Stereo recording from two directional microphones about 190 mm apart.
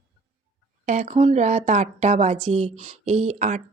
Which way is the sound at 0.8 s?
40° right (ahead or behind).